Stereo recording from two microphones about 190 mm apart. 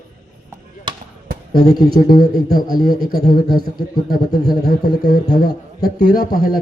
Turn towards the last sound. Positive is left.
turn(degrees=50)  # may be behind; listen again after turning